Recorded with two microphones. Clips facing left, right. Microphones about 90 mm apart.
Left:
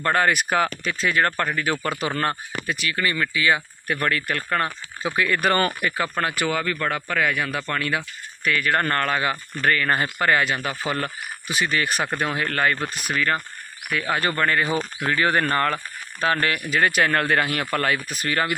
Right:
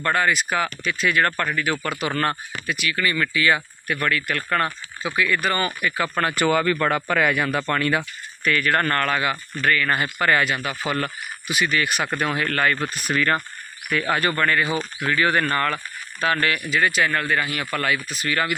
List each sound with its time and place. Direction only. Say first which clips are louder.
0.1 s speech: left 1 dB; 50° left (ahead or behind); by 3.2 s 30° left (ahead or behind)
3.2 s speech: right 1 dB; 15° left (ahead or behind)
3.8 s speech: even; 35° left (ahead or behind)
4.4 s speech: right 2 dB; 15° left (ahead or behind)
5.1 s speech: left 1 dB; 45° left (ahead or behind)
6.1 s a man's voice: right 4 dB; 10° left (ahead or behind)
8.4 s speech: right 1 dB; 15° left (ahead or behind)
10.6 s speech: right 1 dB; 35° left (ahead or behind)
12.1 s speech: right 1 dB; 25° left (ahead or behind)
14.1 s speech: right 1 dB; 25° left (ahead or behind)
16.6 s speech: left 2 dB; 50° left (ahead or behind)
17.7 s speech: left 1 dB; 40° left (ahead or behind)